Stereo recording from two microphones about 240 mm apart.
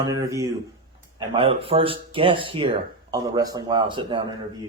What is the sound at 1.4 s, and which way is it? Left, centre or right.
Speech, right.